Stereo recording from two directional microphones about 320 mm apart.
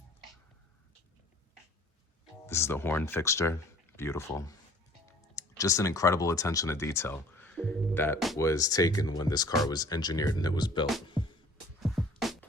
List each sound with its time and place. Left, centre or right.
2.5 s speech: centre
11.8 s music: centre